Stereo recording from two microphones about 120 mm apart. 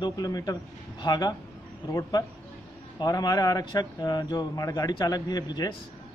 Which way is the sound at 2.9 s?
35° left (ahead or behind).